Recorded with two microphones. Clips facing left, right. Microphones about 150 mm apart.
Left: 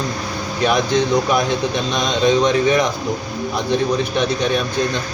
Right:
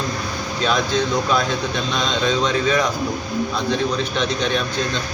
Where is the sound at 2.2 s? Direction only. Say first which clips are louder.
Left 6 dB; 20° left (ahead or behind).